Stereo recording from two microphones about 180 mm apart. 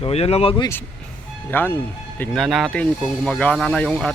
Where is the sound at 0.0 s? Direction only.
35° left (ahead or behind).